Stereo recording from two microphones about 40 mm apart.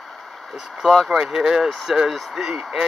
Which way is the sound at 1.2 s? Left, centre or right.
Centre.